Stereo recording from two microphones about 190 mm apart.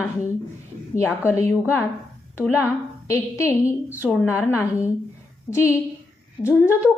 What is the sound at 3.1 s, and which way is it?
A woman's voice, 15° left (ahead or behind).